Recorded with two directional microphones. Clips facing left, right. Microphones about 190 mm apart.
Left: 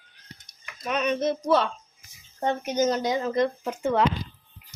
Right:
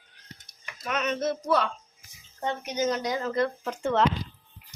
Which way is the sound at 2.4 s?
45° left (ahead or behind).